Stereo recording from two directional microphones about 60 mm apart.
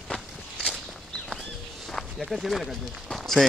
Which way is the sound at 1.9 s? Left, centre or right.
Centre.